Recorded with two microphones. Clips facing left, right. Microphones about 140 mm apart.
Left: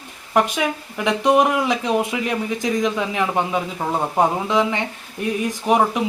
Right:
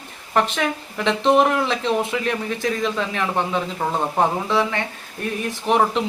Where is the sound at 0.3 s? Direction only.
10° left (ahead or behind).